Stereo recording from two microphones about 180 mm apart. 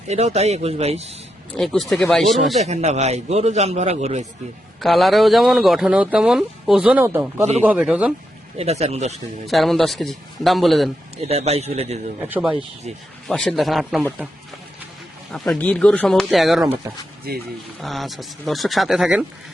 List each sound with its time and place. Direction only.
0.1 s a man's voice: 35° right (ahead or behind)
1.5 s a man's voice: centre (ahead or behind)
2.6 s a man's voice: 40° right (ahead or behind)
4.8 s a man's voice: centre (ahead or behind)
8.5 s a man's voice: 35° right (ahead or behind)
9.5 s a man's voice: centre (ahead or behind)
11.2 s a man's voice: 35° right (ahead or behind)
12.3 s a man's voice: 5° right (ahead or behind)
15.3 s a man's voice: 5° left (ahead or behind)
17.3 s speech: 60° right (ahead or behind)
17.7 s a man's voice: centre (ahead or behind)